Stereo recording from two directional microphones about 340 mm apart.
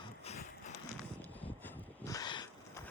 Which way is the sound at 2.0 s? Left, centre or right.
Centre.